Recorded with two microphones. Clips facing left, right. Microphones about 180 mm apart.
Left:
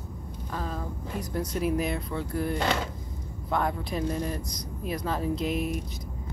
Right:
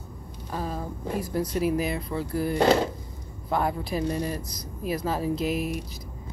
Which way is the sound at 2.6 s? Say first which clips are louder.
Right 12 dB; 35° right (ahead or behind).